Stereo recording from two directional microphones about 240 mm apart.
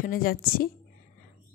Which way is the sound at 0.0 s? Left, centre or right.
Left.